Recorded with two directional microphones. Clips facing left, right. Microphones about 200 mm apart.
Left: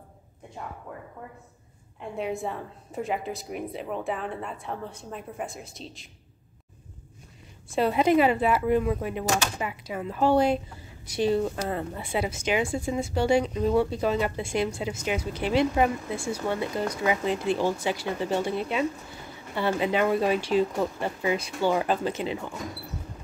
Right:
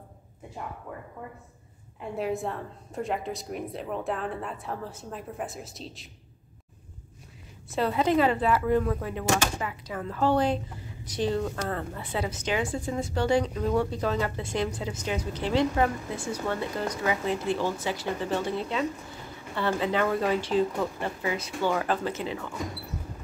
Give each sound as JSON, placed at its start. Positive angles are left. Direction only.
{"t": 2.0, "sound": "a woman's voice", "side_deg": 0}
{"t": 7.7, "sound": "a woman's voice", "side_deg": 15}